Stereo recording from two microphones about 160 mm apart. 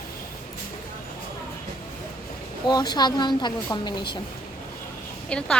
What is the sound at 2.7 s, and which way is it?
Speech, 25° left (ahead or behind).